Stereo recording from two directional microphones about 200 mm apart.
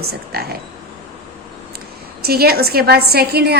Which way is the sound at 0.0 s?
50° right (ahead or behind).